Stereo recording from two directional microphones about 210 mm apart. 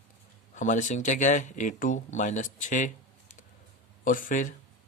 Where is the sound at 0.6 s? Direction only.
35° left (ahead or behind).